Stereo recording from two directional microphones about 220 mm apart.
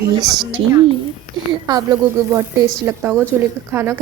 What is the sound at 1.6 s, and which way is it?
A woman's voice, 20° right (ahead or behind).